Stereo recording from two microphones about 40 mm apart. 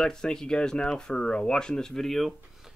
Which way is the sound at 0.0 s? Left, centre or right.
Centre.